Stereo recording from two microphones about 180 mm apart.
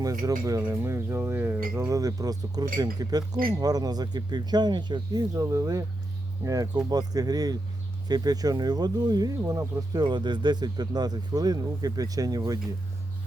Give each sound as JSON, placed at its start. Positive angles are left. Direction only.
{"t": 0.0, "sound": "speech", "side_deg": -20}